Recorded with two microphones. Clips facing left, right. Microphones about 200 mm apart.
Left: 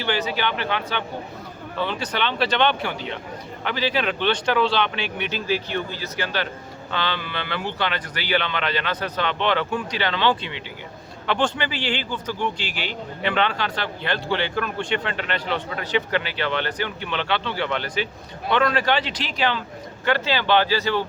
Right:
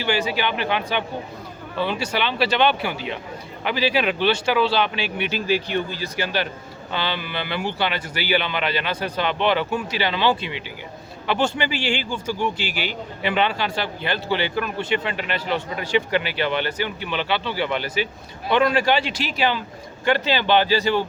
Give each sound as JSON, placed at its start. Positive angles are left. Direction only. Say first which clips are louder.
{"t": 0.0, "sound": "speech", "louder": "right 2 dB", "side_deg": -10}